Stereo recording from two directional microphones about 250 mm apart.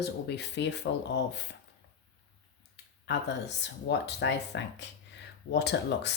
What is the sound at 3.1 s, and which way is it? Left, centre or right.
Speech, left.